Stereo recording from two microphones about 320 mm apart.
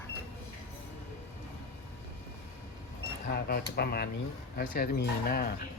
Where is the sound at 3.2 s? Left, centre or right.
Left.